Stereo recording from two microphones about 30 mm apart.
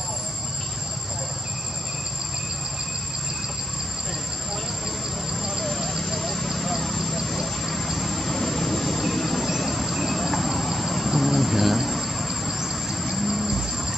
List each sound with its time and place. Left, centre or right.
5.7 s vehicle: centre